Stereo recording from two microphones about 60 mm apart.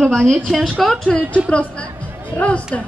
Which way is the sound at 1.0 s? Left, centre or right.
Centre.